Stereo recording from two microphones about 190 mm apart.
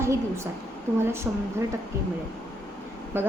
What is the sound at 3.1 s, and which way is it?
Speech, 10° right (ahead or behind).